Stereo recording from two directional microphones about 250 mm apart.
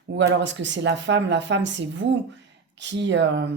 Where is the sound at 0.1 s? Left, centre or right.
Right.